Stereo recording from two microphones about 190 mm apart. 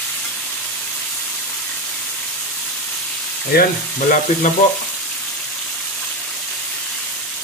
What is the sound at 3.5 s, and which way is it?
Frying, 45° left (ahead or behind).